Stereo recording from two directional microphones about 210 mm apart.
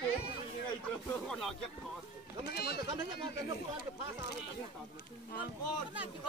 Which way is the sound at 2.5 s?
50° left (ahead or behind).